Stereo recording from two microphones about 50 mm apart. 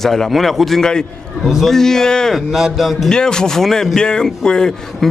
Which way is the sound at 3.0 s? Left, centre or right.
Centre.